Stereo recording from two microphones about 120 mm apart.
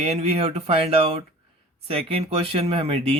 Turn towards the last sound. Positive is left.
turn(degrees=-55)  # may be behind; listen again after turning